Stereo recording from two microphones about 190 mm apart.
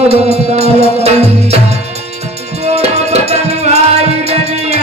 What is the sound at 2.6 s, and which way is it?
Music, 35° right (ahead or behind).